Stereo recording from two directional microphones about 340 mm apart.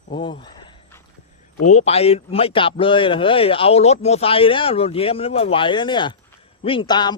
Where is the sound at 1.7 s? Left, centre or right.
Centre.